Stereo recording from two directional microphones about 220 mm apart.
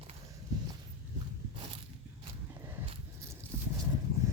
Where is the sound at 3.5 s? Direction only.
20° right (ahead or behind).